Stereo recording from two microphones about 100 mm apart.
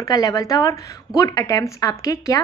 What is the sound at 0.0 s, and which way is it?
Speech, 35° left (ahead or behind).